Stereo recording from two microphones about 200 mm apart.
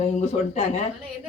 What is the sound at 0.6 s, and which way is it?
Speech, 35° left (ahead or behind).